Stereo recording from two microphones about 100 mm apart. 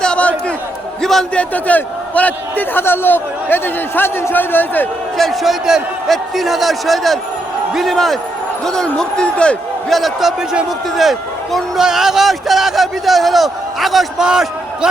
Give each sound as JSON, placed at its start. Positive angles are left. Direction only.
{"t": 0.0, "sound": "chatter", "side_deg": 10}
{"t": 1.0, "sound": "a man's voice", "side_deg": 5}
{"t": 5.1, "sound": "a man's voice", "side_deg": 0}
{"t": 9.9, "sound": "a man's voice", "side_deg": 0}